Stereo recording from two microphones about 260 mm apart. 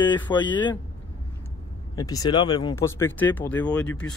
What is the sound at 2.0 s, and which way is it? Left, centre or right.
Speech, centre.